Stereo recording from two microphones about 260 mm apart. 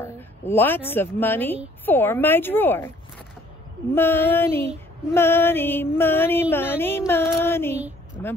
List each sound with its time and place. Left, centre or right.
0.0 s a woman's voice: centre
1.9 s music: centre
3.9 s music: centre
8.2 s speech: centre